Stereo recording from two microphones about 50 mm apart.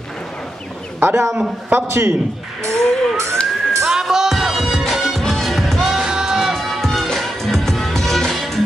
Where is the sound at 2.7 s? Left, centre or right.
Centre.